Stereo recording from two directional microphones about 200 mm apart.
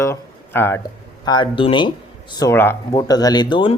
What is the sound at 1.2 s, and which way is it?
Speech, 25° left (ahead or behind).